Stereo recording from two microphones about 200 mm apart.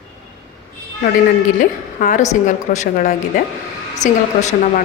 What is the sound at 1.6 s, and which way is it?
A woman's voice, 40° left (ahead or behind).